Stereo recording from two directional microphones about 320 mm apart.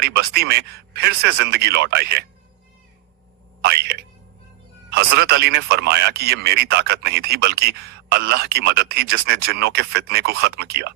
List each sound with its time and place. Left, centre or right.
0.0 s speech: right
3.6 s speech: right